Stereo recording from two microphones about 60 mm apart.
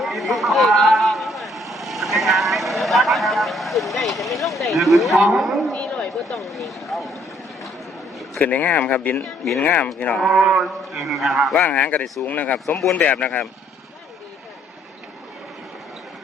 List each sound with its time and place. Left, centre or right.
0.0 s vehicle: centre
4.6 s speech: centre
5.7 s a sound: centre
6.4 s speech: centre
8.4 s speech: left
9.2 s speech: centre
9.6 s speech: left
10.2 s mantra: centre
10.9 s speech: centre
11.6 s speech: left